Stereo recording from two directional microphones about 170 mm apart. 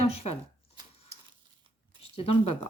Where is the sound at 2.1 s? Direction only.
35° left (ahead or behind).